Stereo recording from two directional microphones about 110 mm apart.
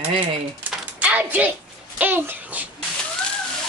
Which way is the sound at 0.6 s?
10° right (ahead or behind).